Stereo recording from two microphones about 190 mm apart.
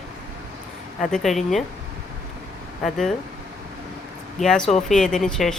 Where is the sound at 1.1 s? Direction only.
Centre (ahead or behind).